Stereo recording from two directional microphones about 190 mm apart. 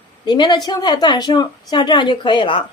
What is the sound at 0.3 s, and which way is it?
Speech, 25° left (ahead or behind).